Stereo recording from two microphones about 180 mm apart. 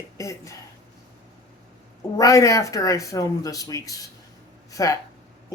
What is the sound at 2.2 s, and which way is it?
Speech, 20° left (ahead or behind).